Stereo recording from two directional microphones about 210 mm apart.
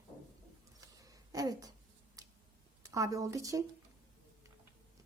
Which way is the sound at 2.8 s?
15° right (ahead or behind).